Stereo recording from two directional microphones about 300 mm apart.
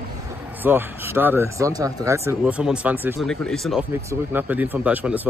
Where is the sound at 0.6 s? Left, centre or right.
Centre.